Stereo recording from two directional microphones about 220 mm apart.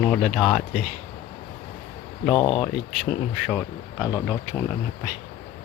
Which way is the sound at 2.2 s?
25° left (ahead or behind).